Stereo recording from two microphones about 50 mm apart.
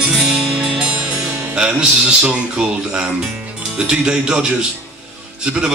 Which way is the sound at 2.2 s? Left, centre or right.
Right.